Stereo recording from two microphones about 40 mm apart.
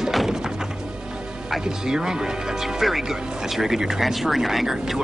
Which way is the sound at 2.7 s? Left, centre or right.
Centre.